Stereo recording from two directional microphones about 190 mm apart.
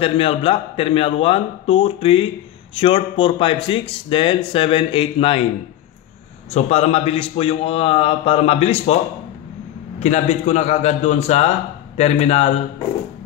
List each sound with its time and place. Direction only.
0.0 s speech: 30° left (ahead or behind)
6.5 s a man's voice: 35° left (ahead or behind)
9.9 s a man's voice: 35° left (ahead or behind)